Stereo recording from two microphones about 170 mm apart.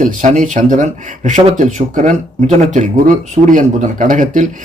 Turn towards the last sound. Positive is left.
turn(degrees=-50)  # may be behind; listen again after turning